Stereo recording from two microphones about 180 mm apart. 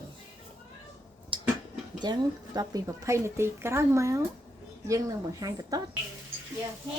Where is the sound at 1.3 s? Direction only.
30° right (ahead or behind).